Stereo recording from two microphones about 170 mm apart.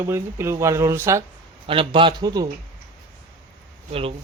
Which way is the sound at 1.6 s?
30° right (ahead or behind).